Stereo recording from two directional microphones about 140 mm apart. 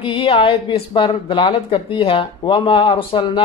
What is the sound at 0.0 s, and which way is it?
Speech, 40° left (ahead or behind).